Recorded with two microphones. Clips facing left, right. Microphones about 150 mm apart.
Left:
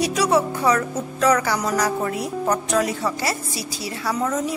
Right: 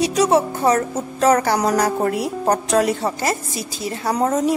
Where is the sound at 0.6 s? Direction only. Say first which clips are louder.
Right 2 dB; 40° right (ahead or behind).